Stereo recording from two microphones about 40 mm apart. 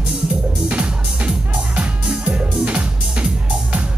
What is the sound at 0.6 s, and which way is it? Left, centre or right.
Music, right.